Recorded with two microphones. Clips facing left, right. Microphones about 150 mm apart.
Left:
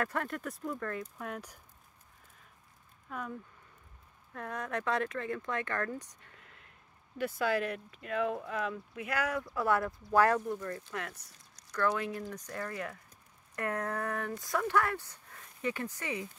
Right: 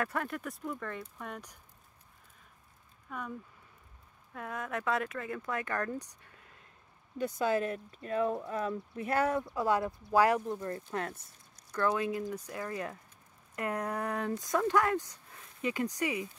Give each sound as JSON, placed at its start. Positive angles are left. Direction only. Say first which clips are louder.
{"t": 0.0, "sound": "speech", "louder": "even", "side_deg": 0}
{"t": 3.1, "sound": "speech", "louder": "even", "side_deg": 0}
{"t": 7.2, "sound": "speech", "louder": "right 1 dB", "side_deg": -20}
{"t": 10.4, "sound": "speech", "louder": "right 1 dB", "side_deg": -25}
{"t": 11.7, "sound": "speech", "louder": "right 1 dB", "side_deg": -20}
{"t": 12.7, "sound": "speech", "louder": "right 2 dB", "side_deg": -25}